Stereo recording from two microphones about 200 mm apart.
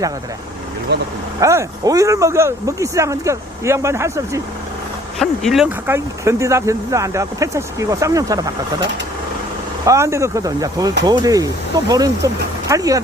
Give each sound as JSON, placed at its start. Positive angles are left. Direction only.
{"t": 1.4, "sound": "speech", "side_deg": -15}
{"t": 5.2, "sound": "speech", "side_deg": 0}
{"t": 9.8, "sound": "speech", "side_deg": -15}